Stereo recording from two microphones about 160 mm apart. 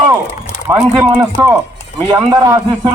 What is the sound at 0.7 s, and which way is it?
Speech, 15° right (ahead or behind).